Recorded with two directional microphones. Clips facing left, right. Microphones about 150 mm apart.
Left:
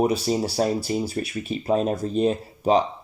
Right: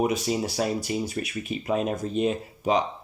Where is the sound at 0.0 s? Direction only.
35° left (ahead or behind).